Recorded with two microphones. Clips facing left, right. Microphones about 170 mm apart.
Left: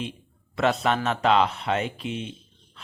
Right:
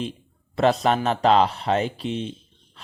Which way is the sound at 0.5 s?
35° right (ahead or behind).